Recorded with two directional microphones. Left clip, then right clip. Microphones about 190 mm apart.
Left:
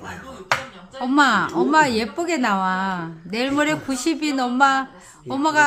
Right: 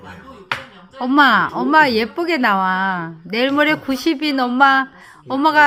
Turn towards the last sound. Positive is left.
turn(degrees=-15)  # may be behind; listen again after turning